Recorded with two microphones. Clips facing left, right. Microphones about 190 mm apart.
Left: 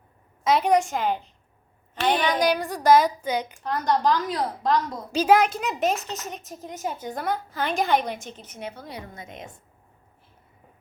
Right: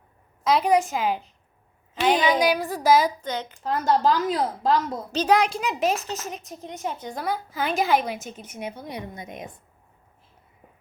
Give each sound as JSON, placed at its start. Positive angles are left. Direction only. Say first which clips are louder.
{"t": 0.4, "sound": "a woman's voice", "louder": "even", "side_deg": 0}
{"t": 3.2, "sound": "a child's voice", "louder": "left 3 dB", "side_deg": 10}
{"t": 4.2, "sound": "a woman's voice", "louder": "right 3 dB", "side_deg": -25}
{"t": 5.1, "sound": "a woman's voice", "louder": "left 2 dB", "side_deg": 5}